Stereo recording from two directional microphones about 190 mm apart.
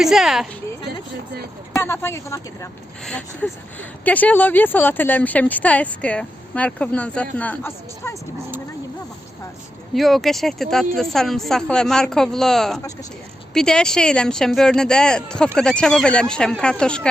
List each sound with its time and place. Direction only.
0.0 s speech: centre (ahead or behind)
1.7 s speech: 15° left (ahead or behind)
3.0 s speech: 5° left (ahead or behind)
9.9 s speech: centre (ahead or behind)